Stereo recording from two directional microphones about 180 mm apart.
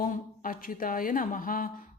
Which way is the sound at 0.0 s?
50° left (ahead or behind).